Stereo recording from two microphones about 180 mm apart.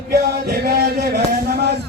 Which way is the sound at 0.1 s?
60° right (ahead or behind).